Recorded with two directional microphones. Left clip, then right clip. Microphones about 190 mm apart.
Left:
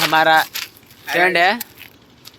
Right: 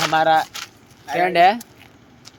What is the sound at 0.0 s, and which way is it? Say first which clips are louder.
Speech: left 3 dB; 15° left (ahead or behind).